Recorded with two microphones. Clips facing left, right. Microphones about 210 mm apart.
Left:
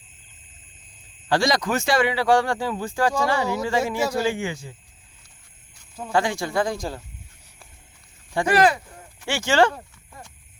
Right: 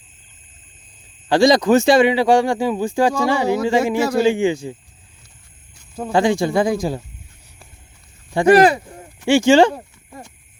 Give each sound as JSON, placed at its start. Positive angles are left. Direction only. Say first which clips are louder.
{"t": 1.3, "sound": "a man's voice", "louder": "right 9 dB", "side_deg": -20}
{"t": 6.1, "sound": "a man's voice", "louder": "right 7 dB", "side_deg": -20}
{"t": 8.3, "sound": "speech", "louder": "right 7 dB", "side_deg": -20}
{"t": 9.7, "sound": "a sound", "louder": "right 7 dB", "side_deg": -25}